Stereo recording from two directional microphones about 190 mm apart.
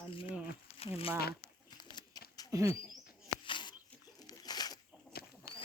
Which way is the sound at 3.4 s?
25° left (ahead or behind).